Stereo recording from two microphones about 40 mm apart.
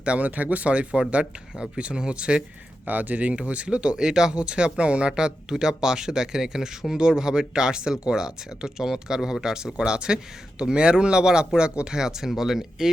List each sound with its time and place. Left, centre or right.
0.0 s speech: right
0.3 s speech: right
2.8 s speech: right
11.9 s speech: centre